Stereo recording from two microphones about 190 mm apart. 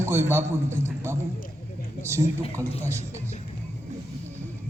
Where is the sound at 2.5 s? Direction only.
15° right (ahead or behind).